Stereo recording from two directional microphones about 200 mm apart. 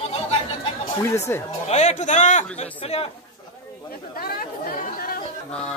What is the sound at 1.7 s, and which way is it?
Speech, 35° left (ahead or behind).